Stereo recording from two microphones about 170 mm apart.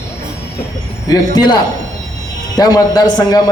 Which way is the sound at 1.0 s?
25° left (ahead or behind).